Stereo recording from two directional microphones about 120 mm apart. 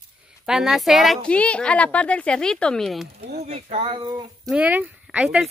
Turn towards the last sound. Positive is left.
turn(degrees=-10)  # may be behind; listen again after turning